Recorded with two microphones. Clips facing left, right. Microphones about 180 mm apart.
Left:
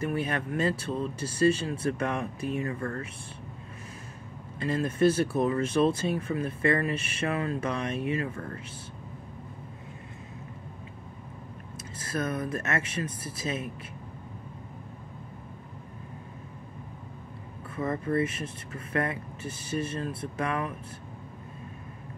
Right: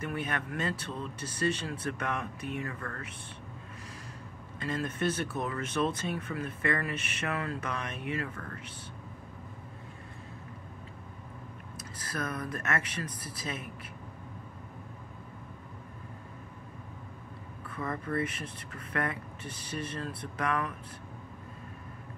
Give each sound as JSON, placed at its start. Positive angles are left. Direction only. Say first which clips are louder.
{"t": 0.0, "sound": "speech", "louder": "left 5 dB", "side_deg": 30}
{"t": 4.6, "sound": "speech", "louder": "left 7 dB", "side_deg": 30}
{"t": 12.0, "sound": "speech", "louder": "left 5 dB", "side_deg": 25}
{"t": 17.6, "sound": "speech", "louder": "left 6 dB", "side_deg": 25}